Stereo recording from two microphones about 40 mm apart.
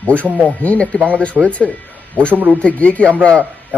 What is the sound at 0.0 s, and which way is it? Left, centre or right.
Speech, left.